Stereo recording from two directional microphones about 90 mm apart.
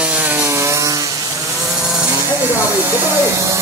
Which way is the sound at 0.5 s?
35° right (ahead or behind).